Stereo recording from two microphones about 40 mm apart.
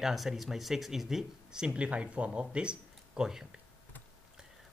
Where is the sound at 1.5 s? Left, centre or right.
Right.